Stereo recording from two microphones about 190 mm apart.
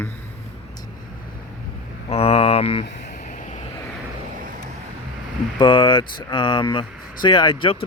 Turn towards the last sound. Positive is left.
turn(degrees=25)  # may be behind; listen again after turning